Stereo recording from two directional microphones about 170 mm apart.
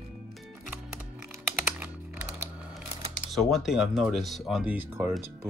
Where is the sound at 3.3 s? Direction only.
Centre (ahead or behind).